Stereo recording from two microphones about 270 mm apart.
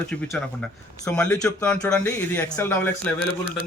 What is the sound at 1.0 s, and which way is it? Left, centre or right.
Speech, centre.